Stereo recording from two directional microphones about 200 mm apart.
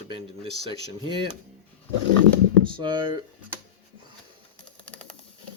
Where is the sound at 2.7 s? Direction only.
25° right (ahead or behind).